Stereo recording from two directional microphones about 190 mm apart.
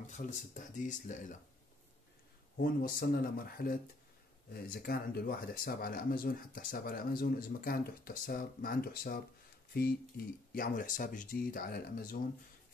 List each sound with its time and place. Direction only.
0.0 s speech: 40° left (ahead or behind)
2.5 s speech: 50° left (ahead or behind)